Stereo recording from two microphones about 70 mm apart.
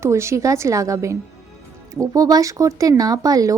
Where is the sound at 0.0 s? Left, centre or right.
Right.